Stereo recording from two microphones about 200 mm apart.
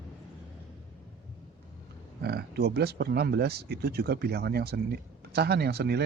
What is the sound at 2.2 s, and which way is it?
Speech, 55° right (ahead or behind).